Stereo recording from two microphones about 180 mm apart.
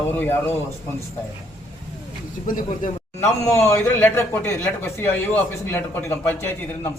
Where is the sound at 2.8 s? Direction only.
50° left (ahead or behind).